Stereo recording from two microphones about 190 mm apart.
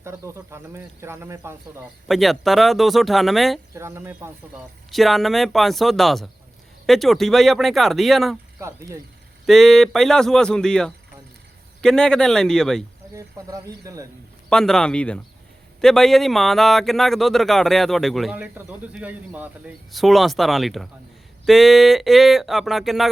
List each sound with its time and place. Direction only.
0.0 s speech: 15° right (ahead or behind)
2.0 s speech: centre (ahead or behind)
3.8 s speech: 15° right (ahead or behind)
4.9 s speech: centre (ahead or behind)
8.6 s speech: 15° right (ahead or behind)
9.5 s speech: centre (ahead or behind)
13.1 s speech: 15° right (ahead or behind)
14.5 s speech: 5° left (ahead or behind)